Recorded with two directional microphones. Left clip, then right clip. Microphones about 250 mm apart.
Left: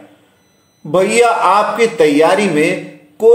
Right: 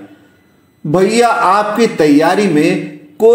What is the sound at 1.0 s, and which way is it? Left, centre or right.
A man's voice, right.